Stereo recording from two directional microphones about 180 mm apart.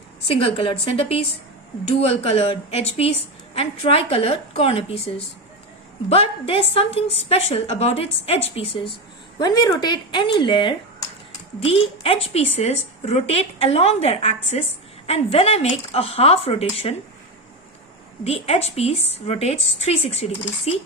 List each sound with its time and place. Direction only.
0.3 s a woman's voice: 30° left (ahead or behind)
9.4 s a woman's voice: 20° left (ahead or behind)
18.2 s a woman's voice: 35° left (ahead or behind)